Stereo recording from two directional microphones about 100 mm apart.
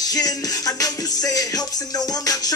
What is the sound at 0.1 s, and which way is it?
Music, 40° left (ahead or behind).